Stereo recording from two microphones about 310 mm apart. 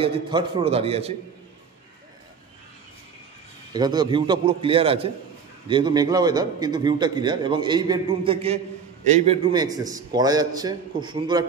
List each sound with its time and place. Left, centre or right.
0.0 s a man's voice: centre
3.7 s a man's voice: centre